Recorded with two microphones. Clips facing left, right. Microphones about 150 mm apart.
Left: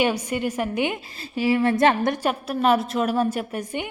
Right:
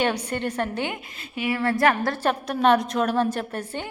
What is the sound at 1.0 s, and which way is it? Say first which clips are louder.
Speech: left 5 dB; 35° left (ahead or behind).